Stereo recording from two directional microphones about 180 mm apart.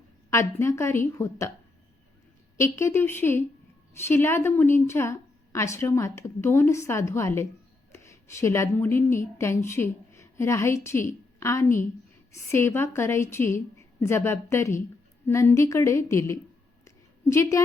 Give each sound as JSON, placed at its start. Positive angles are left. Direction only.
{"t": 0.3, "sound": "a woman's voice", "side_deg": 15}
{"t": 2.6, "sound": "a woman's voice", "side_deg": 15}
{"t": 16.8, "sound": "a sound", "side_deg": 15}